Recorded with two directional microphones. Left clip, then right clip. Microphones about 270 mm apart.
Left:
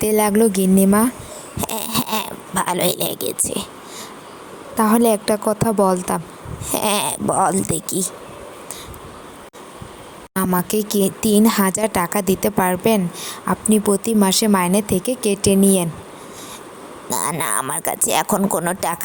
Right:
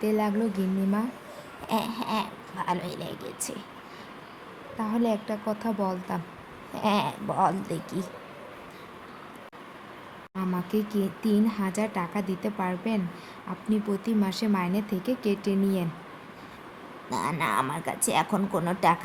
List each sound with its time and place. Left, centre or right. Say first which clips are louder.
0.0 s speech: left 11 dB; left
4.8 s a woman's voice: left 13 dB; left
10.3 s speech: left 11 dB; left
17.1 s speech: left 5 dB; left